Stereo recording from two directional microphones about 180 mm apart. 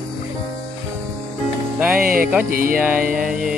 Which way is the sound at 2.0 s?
55° right (ahead or behind).